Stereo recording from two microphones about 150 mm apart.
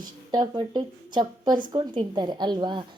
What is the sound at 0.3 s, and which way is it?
A woman's voice, 30° right (ahead or behind).